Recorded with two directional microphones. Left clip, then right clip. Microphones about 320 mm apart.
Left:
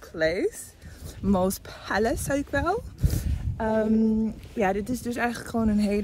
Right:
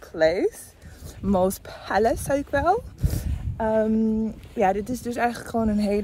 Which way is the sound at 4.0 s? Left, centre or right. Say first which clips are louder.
Even; centre.